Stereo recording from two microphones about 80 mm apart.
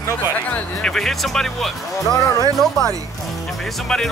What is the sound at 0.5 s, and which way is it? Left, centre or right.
Speech, centre.